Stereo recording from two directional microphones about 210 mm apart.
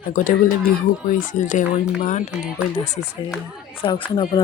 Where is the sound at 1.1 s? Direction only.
35° left (ahead or behind).